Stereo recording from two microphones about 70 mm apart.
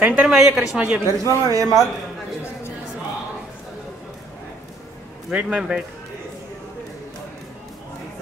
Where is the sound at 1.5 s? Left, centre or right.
Right.